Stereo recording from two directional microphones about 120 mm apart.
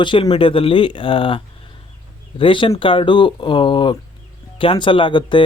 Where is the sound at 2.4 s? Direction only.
45° left (ahead or behind).